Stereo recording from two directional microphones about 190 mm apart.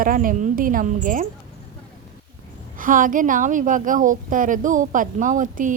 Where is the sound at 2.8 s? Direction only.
45° right (ahead or behind).